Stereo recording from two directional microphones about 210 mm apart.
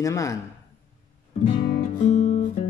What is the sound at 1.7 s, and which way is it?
Music, 35° left (ahead or behind).